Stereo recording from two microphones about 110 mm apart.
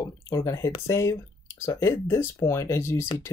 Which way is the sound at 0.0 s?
30° left (ahead or behind).